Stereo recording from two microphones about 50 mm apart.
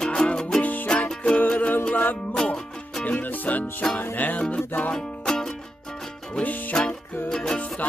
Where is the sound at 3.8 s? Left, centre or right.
Centre.